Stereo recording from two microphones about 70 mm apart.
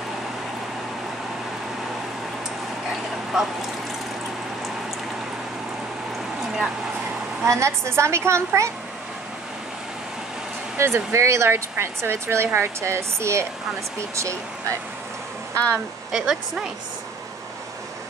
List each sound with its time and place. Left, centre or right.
2.9 s a sound: centre
7.4 s speech: right
10.8 s speech: right
15.5 s speech: centre
16.1 s speech: centre